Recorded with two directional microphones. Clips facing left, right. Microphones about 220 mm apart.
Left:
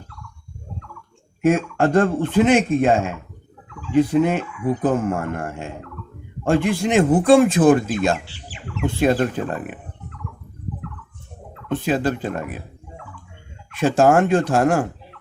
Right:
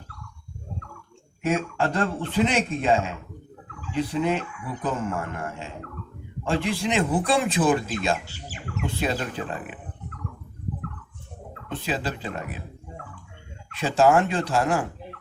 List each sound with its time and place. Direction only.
1.5 s speech: 50° left (ahead or behind)
8.3 s bird: 45° right (ahead or behind)
8.8 s speech: 50° left (ahead or behind)
11.7 s speech: 50° left (ahead or behind)
13.7 s speech: 50° left (ahead or behind)